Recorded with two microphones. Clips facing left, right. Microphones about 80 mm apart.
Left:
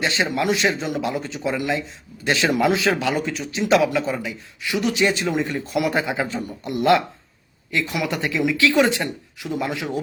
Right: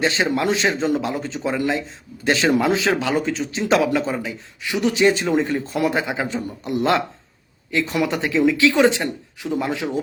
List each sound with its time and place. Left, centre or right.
0.0 s speech: right
5.9 s speech: right